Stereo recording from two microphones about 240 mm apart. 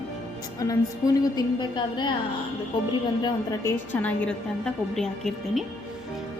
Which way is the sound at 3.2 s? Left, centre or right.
Centre.